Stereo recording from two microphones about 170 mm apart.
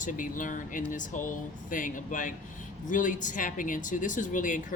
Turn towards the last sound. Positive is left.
turn(degrees=50)  # may be behind; listen again after turning